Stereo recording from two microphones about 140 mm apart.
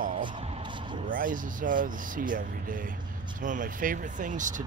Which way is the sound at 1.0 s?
75° right (ahead or behind).